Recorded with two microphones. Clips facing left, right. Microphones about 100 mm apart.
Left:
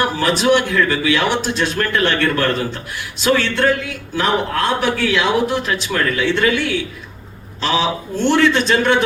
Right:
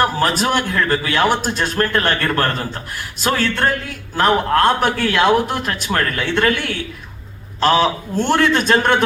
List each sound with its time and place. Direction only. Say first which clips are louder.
0.0 s a man's voice: even; 45° right (ahead or behind)